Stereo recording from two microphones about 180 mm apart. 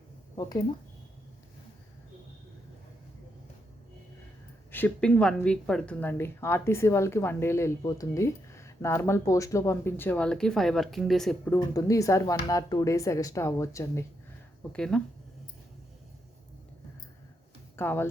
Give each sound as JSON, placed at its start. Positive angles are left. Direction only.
{"t": 0.3, "sound": "speech", "side_deg": 20}
{"t": 4.7, "sound": "a woman's voice", "side_deg": 10}
{"t": 11.5, "sound": "a woman's voice", "side_deg": 20}
{"t": 14.7, "sound": "speech", "side_deg": 5}
{"t": 17.7, "sound": "a woman's voice", "side_deg": 15}